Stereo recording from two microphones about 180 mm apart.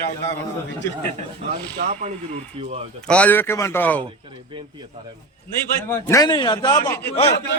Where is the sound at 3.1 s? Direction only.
10° left (ahead or behind).